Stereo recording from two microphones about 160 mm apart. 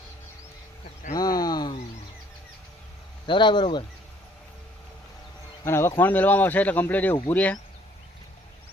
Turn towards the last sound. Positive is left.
turn(degrees=10)  # may be behind; listen again after turning